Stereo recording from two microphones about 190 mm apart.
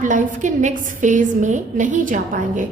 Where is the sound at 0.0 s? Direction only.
40° right (ahead or behind).